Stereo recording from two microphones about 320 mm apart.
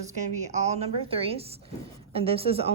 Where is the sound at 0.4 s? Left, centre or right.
Right.